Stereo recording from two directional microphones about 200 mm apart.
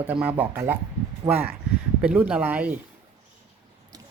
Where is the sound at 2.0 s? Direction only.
5° right (ahead or behind).